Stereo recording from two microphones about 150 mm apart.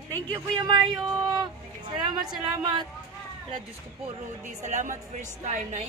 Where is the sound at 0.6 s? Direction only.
30° right (ahead or behind).